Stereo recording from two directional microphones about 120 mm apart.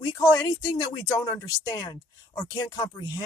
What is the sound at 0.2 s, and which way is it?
Speech, 30° left (ahead or behind).